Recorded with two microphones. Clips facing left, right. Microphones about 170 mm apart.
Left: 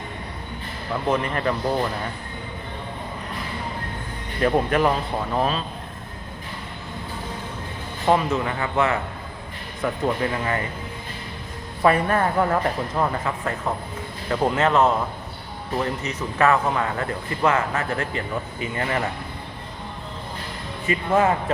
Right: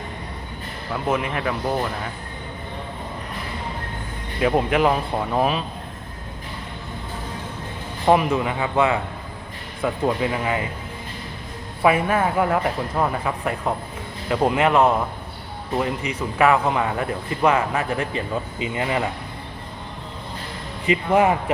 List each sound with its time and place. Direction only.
1.0 s speech: 5° right (ahead or behind)
4.4 s speech: 10° right (ahead or behind)
8.0 s speech: 15° right (ahead or behind)
11.8 s speech: 10° right (ahead or behind)
20.8 s speech: 15° right (ahead or behind)